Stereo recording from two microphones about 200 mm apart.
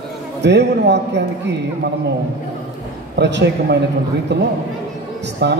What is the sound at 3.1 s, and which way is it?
A man's voice, 60° right (ahead or behind).